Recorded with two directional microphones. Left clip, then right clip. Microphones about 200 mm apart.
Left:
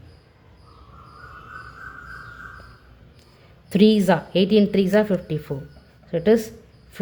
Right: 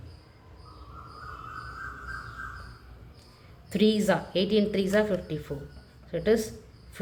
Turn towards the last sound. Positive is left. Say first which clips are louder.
# left 6 dB
turn(degrees=45)  # may be behind; listen again after turning